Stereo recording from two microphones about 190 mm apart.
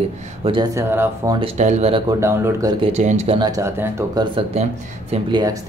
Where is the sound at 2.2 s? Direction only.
15° right (ahead or behind).